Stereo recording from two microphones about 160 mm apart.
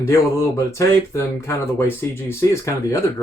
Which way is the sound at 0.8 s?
20° left (ahead or behind).